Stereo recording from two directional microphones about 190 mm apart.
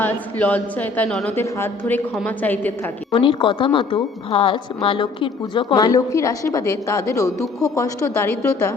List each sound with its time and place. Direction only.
0.0 s a woman's voice: 10° left (ahead or behind)
3.2 s a woman's voice: 25° left (ahead or behind)